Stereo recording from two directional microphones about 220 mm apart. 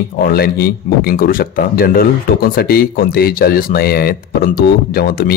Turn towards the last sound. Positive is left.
turn(degrees=45)  # may be behind; listen again after turning